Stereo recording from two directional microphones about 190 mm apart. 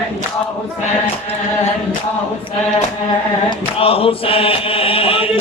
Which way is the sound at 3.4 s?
30° left (ahead or behind).